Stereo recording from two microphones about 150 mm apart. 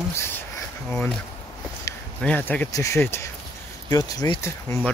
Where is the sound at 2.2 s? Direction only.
10° left (ahead or behind).